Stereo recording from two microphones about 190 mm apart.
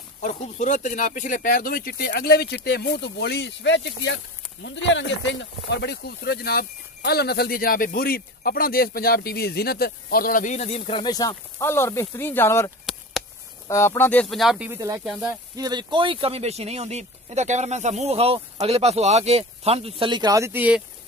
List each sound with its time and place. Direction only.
0.2 s speech: 40° left (ahead or behind); by 20.8 s 10° right (ahead or behind)